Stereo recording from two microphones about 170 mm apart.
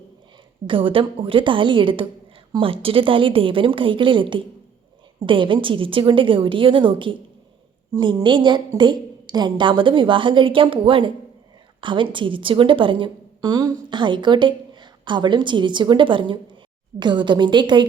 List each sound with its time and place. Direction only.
0.7 s a woman's voice: 30° right (ahead or behind)